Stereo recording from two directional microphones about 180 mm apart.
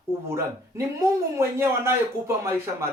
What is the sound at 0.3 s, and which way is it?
Speech, 15° right (ahead or behind).